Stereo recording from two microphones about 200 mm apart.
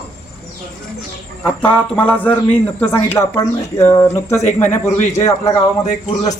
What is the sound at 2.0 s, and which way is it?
Speech, 10° left (ahead or behind).